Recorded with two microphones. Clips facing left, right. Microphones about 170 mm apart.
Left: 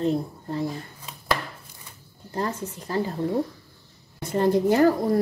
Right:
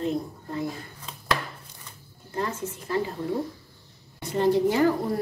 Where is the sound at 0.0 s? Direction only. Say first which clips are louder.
Left 3 dB; 30° left (ahead or behind).